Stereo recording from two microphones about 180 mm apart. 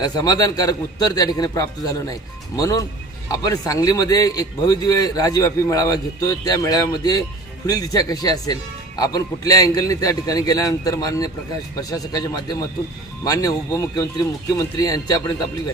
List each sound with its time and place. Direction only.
0.0 s a man's voice: 20° left (ahead or behind)